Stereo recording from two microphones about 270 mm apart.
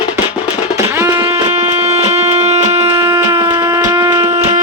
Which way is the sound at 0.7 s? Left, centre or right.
Centre.